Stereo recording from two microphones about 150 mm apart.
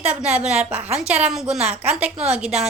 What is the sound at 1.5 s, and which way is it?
Speech, 45° right (ahead or behind).